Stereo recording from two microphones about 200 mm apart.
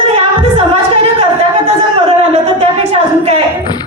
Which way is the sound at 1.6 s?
30° right (ahead or behind).